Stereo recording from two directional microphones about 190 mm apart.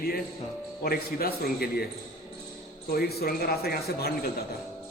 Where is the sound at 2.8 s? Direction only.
55° left (ahead or behind).